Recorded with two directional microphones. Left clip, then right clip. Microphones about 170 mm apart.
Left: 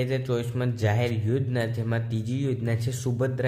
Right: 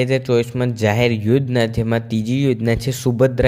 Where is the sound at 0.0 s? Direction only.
45° right (ahead or behind).